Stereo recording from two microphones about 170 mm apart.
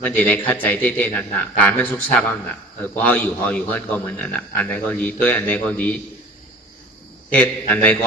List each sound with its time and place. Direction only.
0.0 s a man's voice: 10° left (ahead or behind)
7.2 s a man's voice: 10° left (ahead or behind)